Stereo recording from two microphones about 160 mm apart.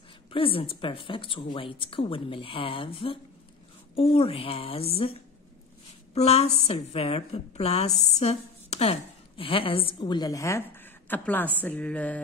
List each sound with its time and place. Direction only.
0.3 s a woman's voice: 35° left (ahead or behind)
6.1 s a woman's voice: 40° left (ahead or behind); by 11.5 s 10° left (ahead or behind)
11.6 s mantra: 5° left (ahead or behind)